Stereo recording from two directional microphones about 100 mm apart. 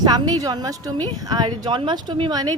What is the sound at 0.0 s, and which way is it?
A woman's voice, 45° right (ahead or behind).